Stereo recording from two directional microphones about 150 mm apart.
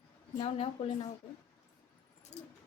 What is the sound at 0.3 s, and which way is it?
Speech, 40° left (ahead or behind).